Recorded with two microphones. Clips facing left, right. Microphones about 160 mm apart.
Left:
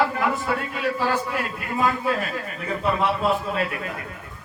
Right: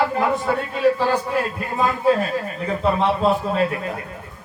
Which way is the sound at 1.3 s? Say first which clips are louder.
Right 4 dB; 30° right (ahead or behind).